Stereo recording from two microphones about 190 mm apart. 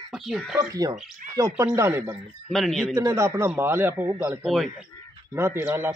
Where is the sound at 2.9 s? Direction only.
15° right (ahead or behind); by 4.7 s centre (ahead or behind).